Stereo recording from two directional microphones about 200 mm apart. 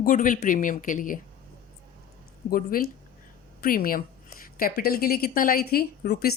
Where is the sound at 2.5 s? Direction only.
45° left (ahead or behind).